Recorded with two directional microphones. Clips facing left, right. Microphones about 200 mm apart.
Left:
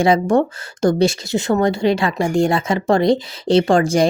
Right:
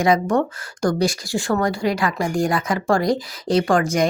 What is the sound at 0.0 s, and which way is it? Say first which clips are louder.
Speech: left 3 dB; 30° left (ahead or behind).